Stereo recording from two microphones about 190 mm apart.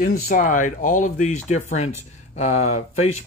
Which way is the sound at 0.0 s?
45° left (ahead or behind).